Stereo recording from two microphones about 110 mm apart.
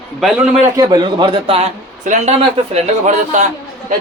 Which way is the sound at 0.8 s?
35° right (ahead or behind).